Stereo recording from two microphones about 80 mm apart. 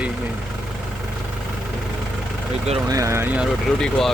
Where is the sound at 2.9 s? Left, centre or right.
Right.